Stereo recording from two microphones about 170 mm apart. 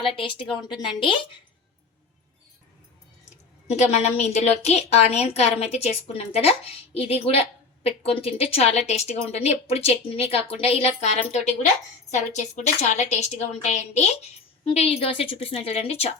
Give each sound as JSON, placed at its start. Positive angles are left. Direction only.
{"t": 0.0, "sound": "speech", "side_deg": 30}
{"t": 3.7, "sound": "a woman's voice", "side_deg": 40}